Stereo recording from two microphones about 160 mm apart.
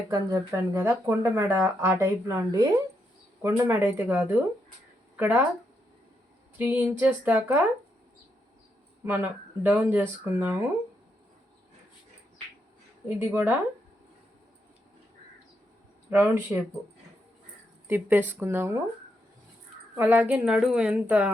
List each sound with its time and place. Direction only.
0.1 s speech: 20° right (ahead or behind)
6.6 s speech: 10° right (ahead or behind)
9.6 s speech: 10° right (ahead or behind)
13.1 s speech: 10° right (ahead or behind)
16.0 s speech: 15° right (ahead or behind)
17.8 s speech: 15° right (ahead or behind)
20.0 s speech: 10° right (ahead or behind)